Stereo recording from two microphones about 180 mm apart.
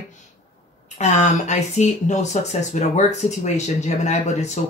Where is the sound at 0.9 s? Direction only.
40° left (ahead or behind).